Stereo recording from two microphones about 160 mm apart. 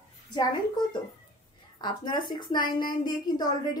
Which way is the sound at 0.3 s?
25° left (ahead or behind).